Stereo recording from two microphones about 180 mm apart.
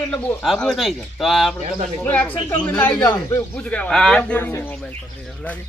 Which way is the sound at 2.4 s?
25° left (ahead or behind).